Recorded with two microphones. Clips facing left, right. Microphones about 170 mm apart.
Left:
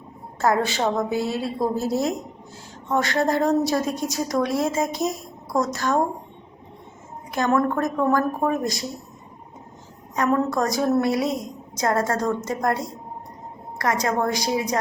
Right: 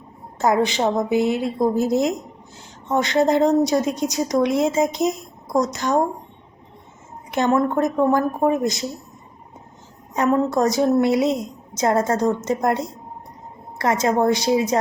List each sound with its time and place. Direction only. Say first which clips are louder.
0.3 s speech: right 3 dB; 20° right (ahead or behind)
7.3 s speech: right 2 dB; 25° right (ahead or behind)
10.2 s speech: right 3 dB; 25° right (ahead or behind)